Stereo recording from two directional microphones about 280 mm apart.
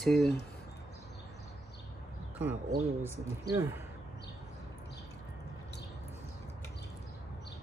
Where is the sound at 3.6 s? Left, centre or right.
Centre.